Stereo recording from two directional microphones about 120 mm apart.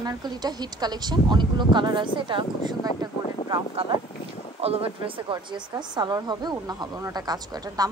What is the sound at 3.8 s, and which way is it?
A woman's voice, 50° right (ahead or behind).